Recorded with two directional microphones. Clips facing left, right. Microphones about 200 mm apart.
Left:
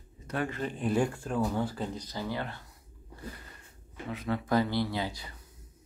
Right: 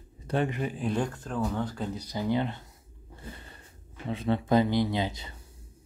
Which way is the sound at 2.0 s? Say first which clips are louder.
Right 6 dB; 20° right (ahead or behind).